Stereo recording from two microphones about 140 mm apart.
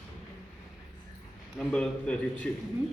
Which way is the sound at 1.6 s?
5° left (ahead or behind).